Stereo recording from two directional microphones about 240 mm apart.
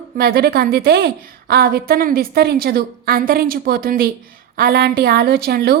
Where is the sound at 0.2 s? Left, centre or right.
Right.